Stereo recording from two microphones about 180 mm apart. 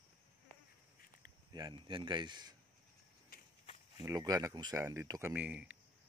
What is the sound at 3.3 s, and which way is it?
Walk, 55° left (ahead or behind).